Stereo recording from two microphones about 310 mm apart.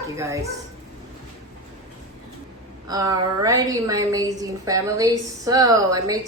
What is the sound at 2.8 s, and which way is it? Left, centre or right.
A woman's voice, centre.